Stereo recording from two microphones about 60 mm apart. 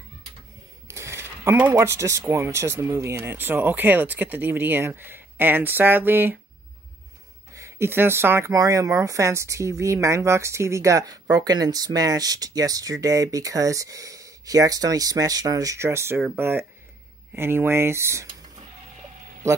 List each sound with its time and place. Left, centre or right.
0.8 s coin: right
1.8 s speech: right
3.3 s speech: right
7.5 s a sound: right
7.9 s speech: right
8.5 s speech: right
15.8 s speech: right
19.4 s speech: right